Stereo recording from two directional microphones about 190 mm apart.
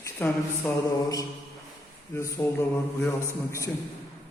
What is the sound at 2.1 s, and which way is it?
A man's voice, 15° left (ahead or behind).